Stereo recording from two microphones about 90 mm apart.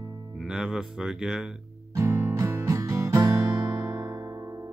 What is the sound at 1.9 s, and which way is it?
Music, 30° right (ahead or behind).